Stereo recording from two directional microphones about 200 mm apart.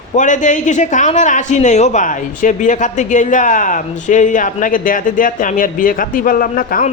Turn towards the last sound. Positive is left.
turn(degrees=45)  # may be behind; listen again after turning